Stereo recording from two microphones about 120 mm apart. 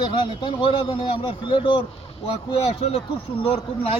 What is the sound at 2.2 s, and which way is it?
A man's voice, 55° left (ahead or behind).